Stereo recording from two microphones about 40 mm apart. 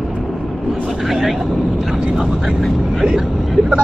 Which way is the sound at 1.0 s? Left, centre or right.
Centre.